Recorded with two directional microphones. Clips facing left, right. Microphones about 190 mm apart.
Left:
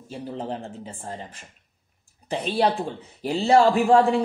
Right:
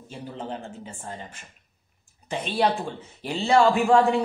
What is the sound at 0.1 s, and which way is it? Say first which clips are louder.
A woman's voice: left 3 dB; 35° left (ahead or behind).